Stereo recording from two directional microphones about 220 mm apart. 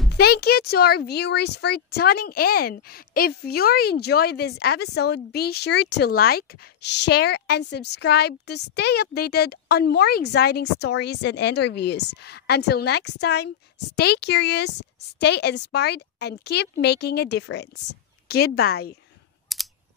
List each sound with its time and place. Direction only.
0.1 s speech: 45° left (ahead or behind)
19.5 s typing: centre (ahead or behind)